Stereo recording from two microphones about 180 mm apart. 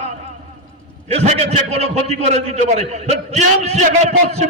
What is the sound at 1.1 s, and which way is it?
A man's voice, 35° right (ahead or behind).